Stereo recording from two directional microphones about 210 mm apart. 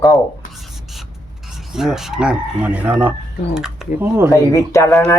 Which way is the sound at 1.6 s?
Centre (ahead or behind).